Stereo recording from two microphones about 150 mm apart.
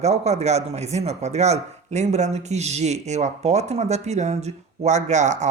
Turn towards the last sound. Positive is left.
turn(degrees=-50)  # may be behind; listen again after turning